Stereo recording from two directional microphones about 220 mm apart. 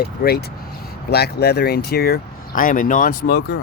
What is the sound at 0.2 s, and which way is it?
Speech, 45° left (ahead or behind).